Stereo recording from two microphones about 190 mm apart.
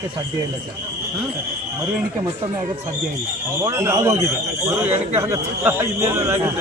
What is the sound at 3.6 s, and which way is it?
A man's voice, 15° right (ahead or behind).